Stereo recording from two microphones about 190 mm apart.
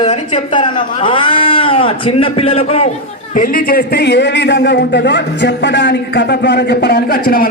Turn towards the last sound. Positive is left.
turn(degrees=50)  # may be behind; listen again after turning